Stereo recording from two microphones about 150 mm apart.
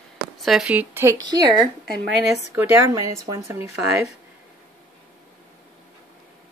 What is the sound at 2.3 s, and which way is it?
Speech, 15° right (ahead or behind).